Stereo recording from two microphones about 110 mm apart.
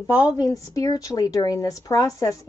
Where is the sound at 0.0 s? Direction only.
30° left (ahead or behind).